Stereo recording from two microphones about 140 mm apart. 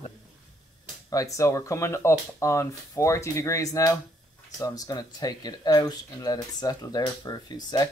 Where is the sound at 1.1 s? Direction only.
25° left (ahead or behind).